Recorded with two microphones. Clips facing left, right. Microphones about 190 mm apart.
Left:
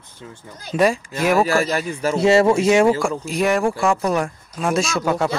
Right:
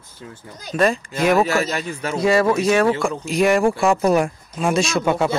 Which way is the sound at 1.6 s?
35° left (ahead or behind).